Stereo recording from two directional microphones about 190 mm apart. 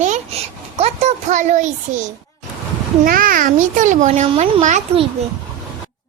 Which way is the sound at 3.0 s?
45° right (ahead or behind).